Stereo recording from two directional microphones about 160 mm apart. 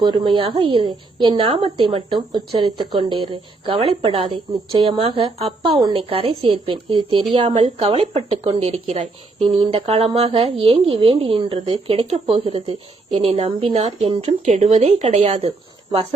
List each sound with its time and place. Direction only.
0.0 s a woman's voice: 30° right (ahead or behind)